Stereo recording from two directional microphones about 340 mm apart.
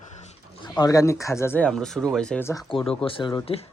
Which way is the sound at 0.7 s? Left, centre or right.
Centre.